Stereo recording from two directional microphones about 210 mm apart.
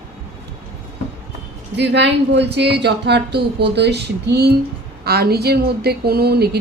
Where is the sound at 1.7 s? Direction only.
55° right (ahead or behind).